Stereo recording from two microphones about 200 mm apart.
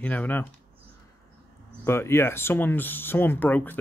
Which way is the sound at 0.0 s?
10° left (ahead or behind).